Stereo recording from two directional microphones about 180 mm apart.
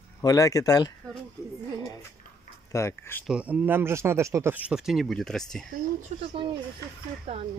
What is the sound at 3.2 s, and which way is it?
Speech, 5° right (ahead or behind).